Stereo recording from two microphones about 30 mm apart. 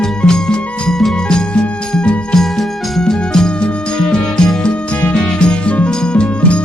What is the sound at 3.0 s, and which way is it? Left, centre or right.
Music, left.